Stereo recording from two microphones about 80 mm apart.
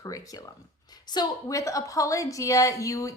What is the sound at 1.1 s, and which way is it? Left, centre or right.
Speech, left.